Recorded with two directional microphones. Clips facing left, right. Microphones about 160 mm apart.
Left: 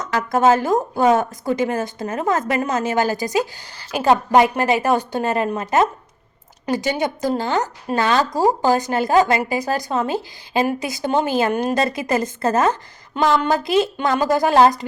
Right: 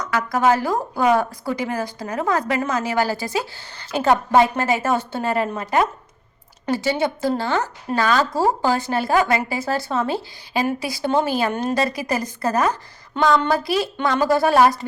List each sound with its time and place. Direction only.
0.0 s a woman's voice: 25° left (ahead or behind)